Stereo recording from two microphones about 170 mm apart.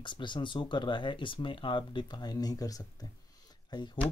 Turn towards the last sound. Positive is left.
turn(degrees=25)  # may be behind; listen again after turning